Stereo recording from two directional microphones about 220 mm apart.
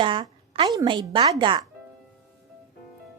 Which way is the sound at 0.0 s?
20° right (ahead or behind).